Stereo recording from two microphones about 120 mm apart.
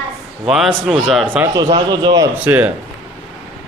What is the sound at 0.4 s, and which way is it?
A man's voice, centre (ahead or behind).